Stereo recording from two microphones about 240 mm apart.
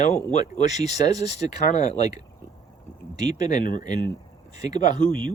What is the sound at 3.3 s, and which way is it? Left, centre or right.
Speech, left.